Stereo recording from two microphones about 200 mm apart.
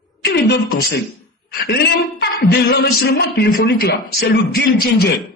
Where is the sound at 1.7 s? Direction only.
55° left (ahead or behind).